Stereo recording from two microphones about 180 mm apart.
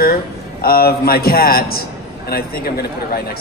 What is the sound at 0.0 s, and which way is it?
A man's voice, 55° left (ahead or behind).